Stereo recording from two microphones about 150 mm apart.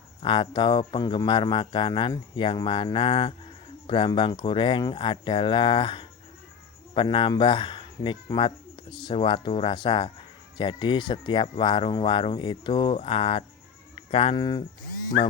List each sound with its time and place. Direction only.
0.2 s speech: 35° left (ahead or behind)
13.9 s bleat: 40° left (ahead or behind)